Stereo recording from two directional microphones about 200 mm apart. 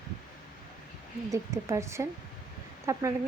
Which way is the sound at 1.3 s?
15° right (ahead or behind).